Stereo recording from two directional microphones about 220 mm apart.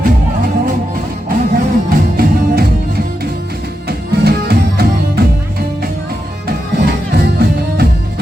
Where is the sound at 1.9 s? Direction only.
45° right (ahead or behind).